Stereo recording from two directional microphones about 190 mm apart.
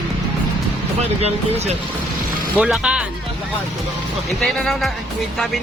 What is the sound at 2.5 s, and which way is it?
Speech, 5° right (ahead or behind).